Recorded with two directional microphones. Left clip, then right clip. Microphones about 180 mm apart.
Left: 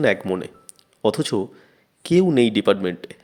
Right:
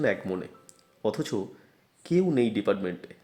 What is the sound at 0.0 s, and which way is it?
Speech, 20° left (ahead or behind).